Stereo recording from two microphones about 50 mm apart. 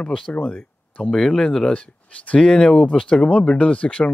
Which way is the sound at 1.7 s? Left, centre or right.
Left.